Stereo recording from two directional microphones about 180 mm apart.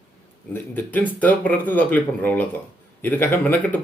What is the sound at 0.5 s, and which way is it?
Speech, 10° left (ahead or behind).